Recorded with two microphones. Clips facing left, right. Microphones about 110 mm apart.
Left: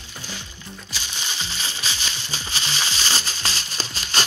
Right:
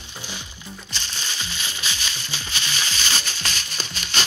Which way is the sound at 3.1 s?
30° left (ahead or behind).